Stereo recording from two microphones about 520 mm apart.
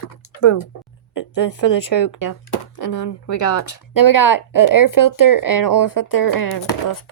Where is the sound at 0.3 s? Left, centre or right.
Left.